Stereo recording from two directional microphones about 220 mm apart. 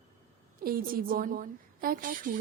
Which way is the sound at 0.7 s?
40° right (ahead or behind).